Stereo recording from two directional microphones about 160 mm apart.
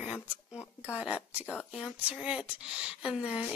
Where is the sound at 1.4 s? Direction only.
10° left (ahead or behind).